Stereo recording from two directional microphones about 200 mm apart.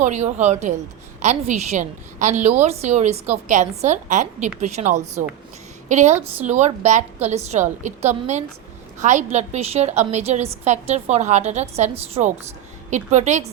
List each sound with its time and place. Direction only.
0.0 s a woman's voice: 35° right (ahead or behind)